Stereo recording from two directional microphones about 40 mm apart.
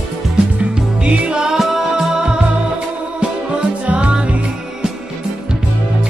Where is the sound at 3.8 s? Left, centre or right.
Right.